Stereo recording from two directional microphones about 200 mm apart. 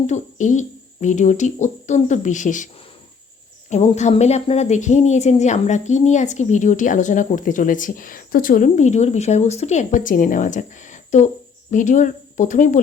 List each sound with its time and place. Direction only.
0.1 s speech: 40° left (ahead or behind)
3.7 s speech: 35° left (ahead or behind)